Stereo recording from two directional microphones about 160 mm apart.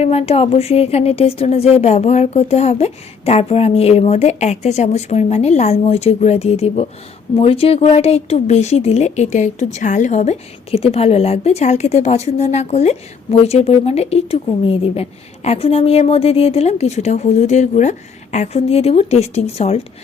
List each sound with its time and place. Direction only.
0.0 s a woman's voice: 40° left (ahead or behind)